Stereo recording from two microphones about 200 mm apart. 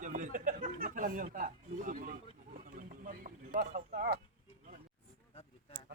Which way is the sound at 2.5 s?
40° right (ahead or behind).